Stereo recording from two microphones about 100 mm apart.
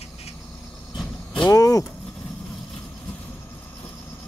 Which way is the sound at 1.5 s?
35° left (ahead or behind).